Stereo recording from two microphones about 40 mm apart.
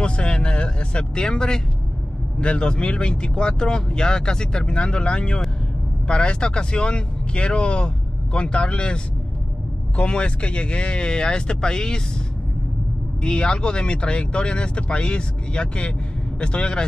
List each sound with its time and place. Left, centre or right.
0.0 s vehicle: left
2.4 s speech: left
13.2 s speech: left